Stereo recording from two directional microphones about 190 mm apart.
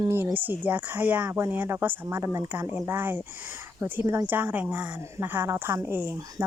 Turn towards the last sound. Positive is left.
turn(degrees=-15)  # may be behind; listen again after turning